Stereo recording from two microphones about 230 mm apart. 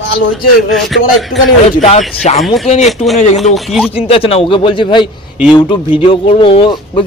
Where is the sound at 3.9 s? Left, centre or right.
Left.